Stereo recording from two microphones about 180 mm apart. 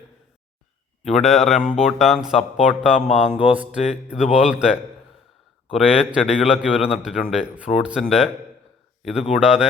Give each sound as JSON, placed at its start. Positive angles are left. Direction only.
{"t": 1.1, "sound": "a man's voice", "side_deg": 0}
{"t": 3.1, "sound": "a sound", "side_deg": 40}
{"t": 3.3, "sound": "a man's voice", "side_deg": -5}
{"t": 9.3, "sound": "a man's voice", "side_deg": -5}